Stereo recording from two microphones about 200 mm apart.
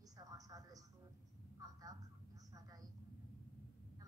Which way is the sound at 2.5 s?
20° right (ahead or behind).